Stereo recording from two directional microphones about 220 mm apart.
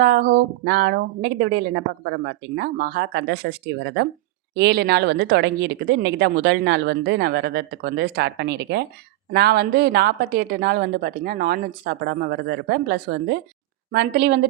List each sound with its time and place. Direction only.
0.0 s a woman's voice: 45° right (ahead or behind)